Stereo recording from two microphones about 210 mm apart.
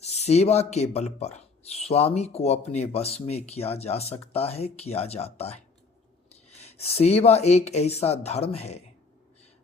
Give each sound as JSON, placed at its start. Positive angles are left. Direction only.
{"t": 0.0, "sound": "speech", "side_deg": 30}